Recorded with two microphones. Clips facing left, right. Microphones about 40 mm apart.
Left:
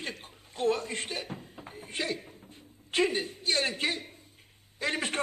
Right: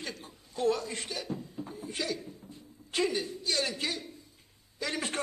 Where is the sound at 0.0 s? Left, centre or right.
Left.